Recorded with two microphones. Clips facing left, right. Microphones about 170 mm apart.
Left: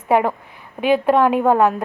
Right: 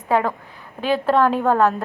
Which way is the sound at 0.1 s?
15° left (ahead or behind).